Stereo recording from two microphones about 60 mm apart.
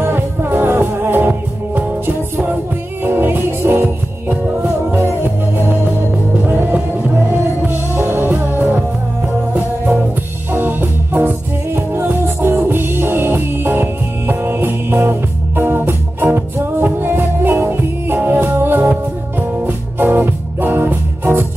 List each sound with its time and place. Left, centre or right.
0.0 s music: right
10.5 s music: right